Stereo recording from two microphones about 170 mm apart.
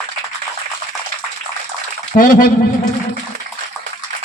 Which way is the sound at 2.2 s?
55° left (ahead or behind).